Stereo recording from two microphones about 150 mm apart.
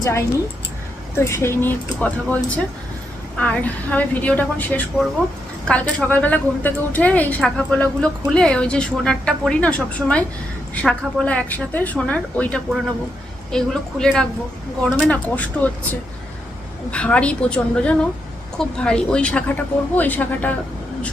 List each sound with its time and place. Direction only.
0.0 s a woman's voice: 20° left (ahead or behind)